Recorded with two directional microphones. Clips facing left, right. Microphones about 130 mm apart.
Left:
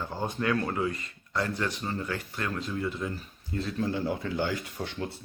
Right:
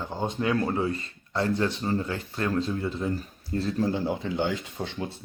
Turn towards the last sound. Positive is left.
turn(degrees=-25)  # may be behind; listen again after turning